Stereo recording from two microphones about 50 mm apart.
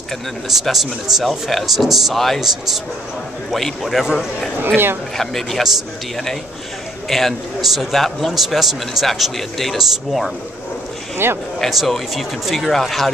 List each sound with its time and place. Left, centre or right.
0.5 s a man's voice: centre
3.5 s a man's voice: centre
4.0 s a man's voice: centre
5.1 s a man's voice: centre
11.2 s speech: right
11.6 s a man's voice: centre